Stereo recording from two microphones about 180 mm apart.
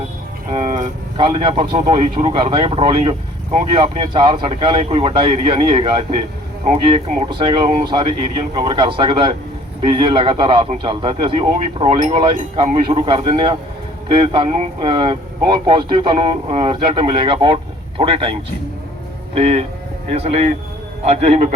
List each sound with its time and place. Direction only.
0.5 s a man's voice: 40° right (ahead or behind)